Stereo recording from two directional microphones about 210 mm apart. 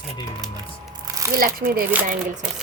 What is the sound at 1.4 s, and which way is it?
Speech, 45° right (ahead or behind).